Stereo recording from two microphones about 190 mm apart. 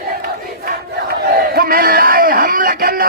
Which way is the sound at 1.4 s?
50° right (ahead or behind).